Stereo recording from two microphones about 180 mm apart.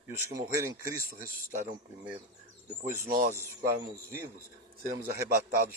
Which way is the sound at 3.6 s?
65° right (ahead or behind).